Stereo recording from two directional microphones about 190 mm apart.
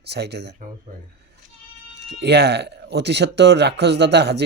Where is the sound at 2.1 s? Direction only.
60° right (ahead or behind).